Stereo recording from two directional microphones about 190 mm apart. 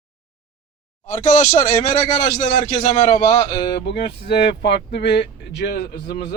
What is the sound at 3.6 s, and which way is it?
Speech, 60° left (ahead or behind).